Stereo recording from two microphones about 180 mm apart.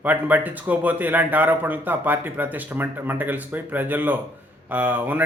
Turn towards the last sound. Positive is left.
turn(degrees=-10)  # may be behind; listen again after turning